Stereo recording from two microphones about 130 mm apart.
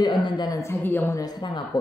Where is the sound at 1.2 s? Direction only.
35° left (ahead or behind).